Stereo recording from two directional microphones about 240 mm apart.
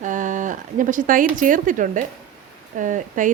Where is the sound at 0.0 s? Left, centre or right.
Right.